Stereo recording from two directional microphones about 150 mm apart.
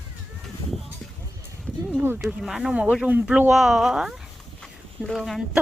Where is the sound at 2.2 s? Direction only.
Centre (ahead or behind).